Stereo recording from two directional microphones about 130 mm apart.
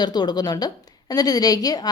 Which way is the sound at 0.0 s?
35° left (ahead or behind).